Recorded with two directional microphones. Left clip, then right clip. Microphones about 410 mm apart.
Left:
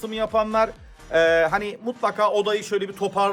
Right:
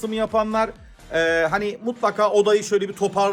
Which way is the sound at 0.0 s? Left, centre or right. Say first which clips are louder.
Right 1 dB; centre.